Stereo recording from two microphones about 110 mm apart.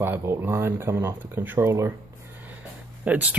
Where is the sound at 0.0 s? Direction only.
20° right (ahead or behind).